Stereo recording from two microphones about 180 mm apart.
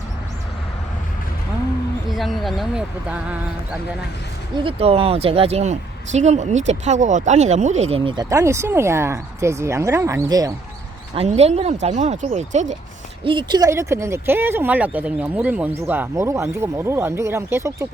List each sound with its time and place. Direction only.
2.0 s speech: centre (ahead or behind)
4.5 s speech: 30° right (ahead or behind)
11.1 s speech: 35° right (ahead or behind)
13.2 s speech: 25° right (ahead or behind)